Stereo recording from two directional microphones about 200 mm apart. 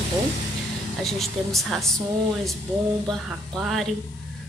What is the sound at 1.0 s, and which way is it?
Speech, centre (ahead or behind).